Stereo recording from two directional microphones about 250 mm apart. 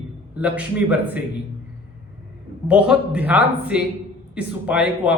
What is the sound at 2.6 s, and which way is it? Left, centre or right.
A man's voice, centre.